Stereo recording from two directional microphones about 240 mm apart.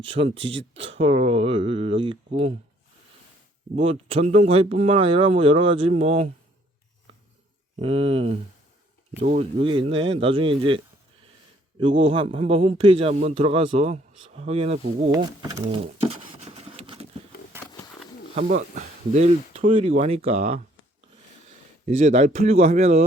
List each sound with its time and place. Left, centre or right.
0.0 s a man's voice: right
3.8 s a man's voice: right
7.8 s a man's voice: right
11.8 s a man's voice: right
15.1 s pigeon: centre
18.8 s a man's voice: right